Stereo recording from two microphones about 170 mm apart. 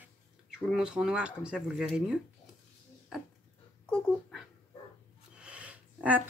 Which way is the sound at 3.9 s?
5° left (ahead or behind).